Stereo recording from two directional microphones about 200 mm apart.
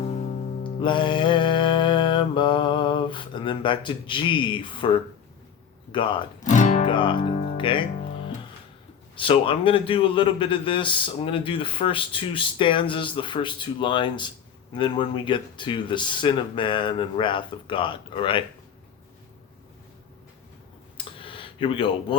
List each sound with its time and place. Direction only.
0.6 s music: 25° left (ahead or behind)
6.5 s music: 35° left (ahead or behind)
6.8 s a man's voice: 25° left (ahead or behind)
7.5 s music: 25° left (ahead or behind)
9.1 s a man's voice: 25° left (ahead or behind)
21.0 s a sound: 25° left (ahead or behind)